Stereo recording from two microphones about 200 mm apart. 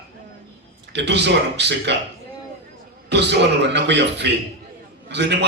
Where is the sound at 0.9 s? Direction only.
60° right (ahead or behind).